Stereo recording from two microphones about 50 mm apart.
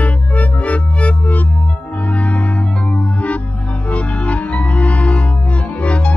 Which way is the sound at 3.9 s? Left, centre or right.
Left.